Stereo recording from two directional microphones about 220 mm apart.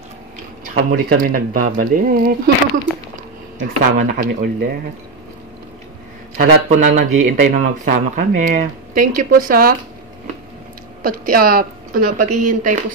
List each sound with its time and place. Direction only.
0.9 s speech: 40° right (ahead or behind)
6.3 s speech: 35° right (ahead or behind)
11.0 s speech: 40° right (ahead or behind)